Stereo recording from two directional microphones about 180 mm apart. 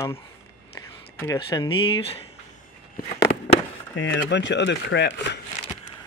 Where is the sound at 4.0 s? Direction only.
85° left.